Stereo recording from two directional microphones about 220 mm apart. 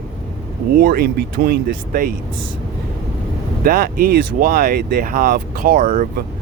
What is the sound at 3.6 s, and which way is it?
Speech, 40° right (ahead or behind).